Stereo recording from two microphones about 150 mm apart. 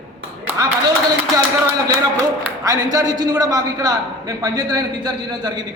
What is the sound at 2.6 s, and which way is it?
A man's voice, 25° right (ahead or behind).